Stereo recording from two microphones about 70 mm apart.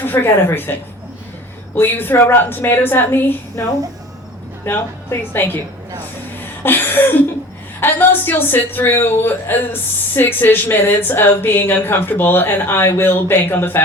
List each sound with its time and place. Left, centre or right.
0.0 s a woman's voice: left
1.7 s a woman's voice: left
4.7 s a woman's voice: left
6.6 s a sound: left
7.8 s a woman's voice: left